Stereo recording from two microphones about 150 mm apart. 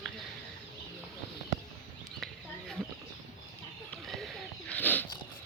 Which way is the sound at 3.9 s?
Centre (ahead or behind).